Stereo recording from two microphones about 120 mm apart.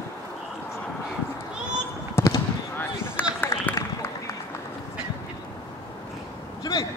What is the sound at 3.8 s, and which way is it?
Run, 25° left (ahead or behind).